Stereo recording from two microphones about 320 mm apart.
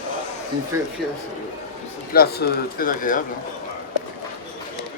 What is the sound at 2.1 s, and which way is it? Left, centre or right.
Speech, left.